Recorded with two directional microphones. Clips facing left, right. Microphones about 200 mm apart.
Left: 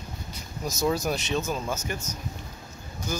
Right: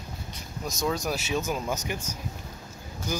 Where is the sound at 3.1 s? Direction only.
15° right (ahead or behind).